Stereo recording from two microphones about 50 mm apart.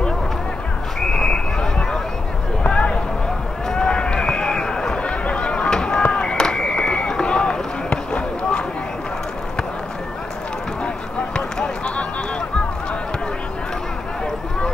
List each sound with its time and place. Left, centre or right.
1.1 s a sound: centre
3.6 s run: centre
10.8 s basketball bounce: centre